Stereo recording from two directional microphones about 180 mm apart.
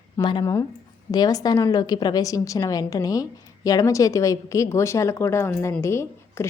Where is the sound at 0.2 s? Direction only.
25° left (ahead or behind).